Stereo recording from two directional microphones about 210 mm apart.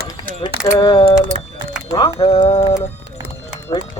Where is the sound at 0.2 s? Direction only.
25° left (ahead or behind).